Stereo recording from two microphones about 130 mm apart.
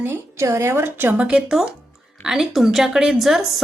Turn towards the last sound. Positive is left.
turn(degrees=0)  # may be behind; listen again after turning